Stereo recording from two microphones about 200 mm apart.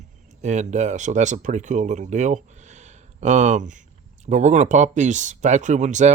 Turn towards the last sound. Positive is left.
turn(degrees=-35)  # may be behind; listen again after turning